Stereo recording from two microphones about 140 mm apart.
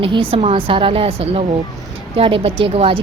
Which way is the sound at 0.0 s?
40° right (ahead or behind).